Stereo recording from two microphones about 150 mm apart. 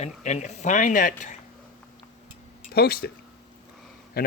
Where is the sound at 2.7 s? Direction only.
90° left.